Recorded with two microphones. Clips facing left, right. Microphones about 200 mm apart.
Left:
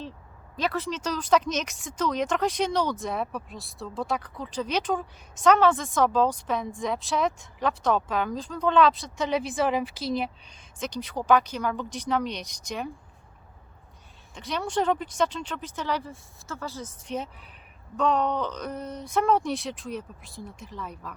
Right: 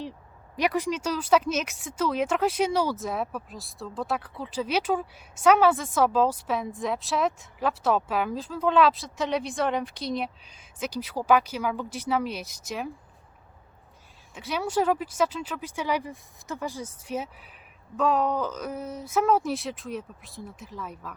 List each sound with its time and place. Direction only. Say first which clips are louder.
0.5 s speech: right 3 dB; 15° right (ahead or behind)
14.3 s speech: right 1 dB; 5° right (ahead or behind)